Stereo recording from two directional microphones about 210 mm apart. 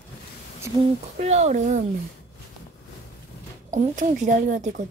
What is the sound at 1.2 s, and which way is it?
Speech, 30° right (ahead or behind).